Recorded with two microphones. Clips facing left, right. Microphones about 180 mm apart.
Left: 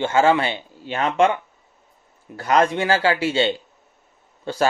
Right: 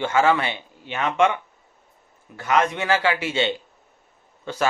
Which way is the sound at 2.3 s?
35° left (ahead or behind).